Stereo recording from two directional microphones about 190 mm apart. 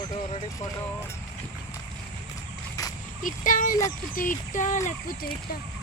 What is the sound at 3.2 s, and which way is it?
Speech, 45° left (ahead or behind).